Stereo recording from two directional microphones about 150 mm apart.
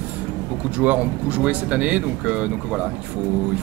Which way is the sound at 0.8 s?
10° right (ahead or behind).